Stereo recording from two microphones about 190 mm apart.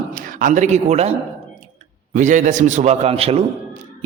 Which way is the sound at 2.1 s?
40° right (ahead or behind).